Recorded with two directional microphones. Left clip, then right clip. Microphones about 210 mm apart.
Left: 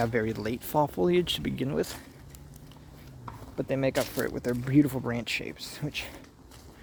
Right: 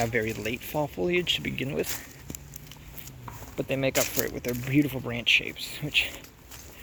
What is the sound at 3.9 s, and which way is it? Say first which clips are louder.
Speech: right 2 dB; 50° right (ahead or behind).